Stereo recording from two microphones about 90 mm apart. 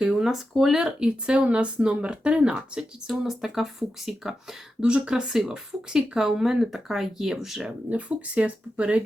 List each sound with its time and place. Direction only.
0.0 s speech: 5° right (ahead or behind)
7.9 s speech: 15° right (ahead or behind)